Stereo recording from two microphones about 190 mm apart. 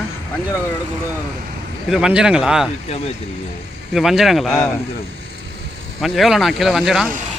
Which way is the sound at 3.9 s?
Centre (ahead or behind).